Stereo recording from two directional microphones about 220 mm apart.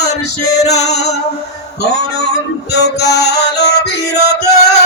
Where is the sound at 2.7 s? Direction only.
50° left (ahead or behind).